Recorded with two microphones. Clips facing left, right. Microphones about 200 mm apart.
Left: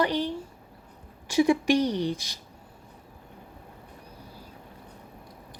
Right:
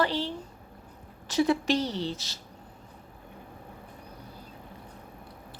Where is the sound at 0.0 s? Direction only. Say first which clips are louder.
Left 2 dB; 15° left (ahead or behind).